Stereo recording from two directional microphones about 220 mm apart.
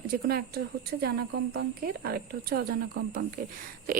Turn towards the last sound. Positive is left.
turn(degrees=-40)  # may be behind; listen again after turning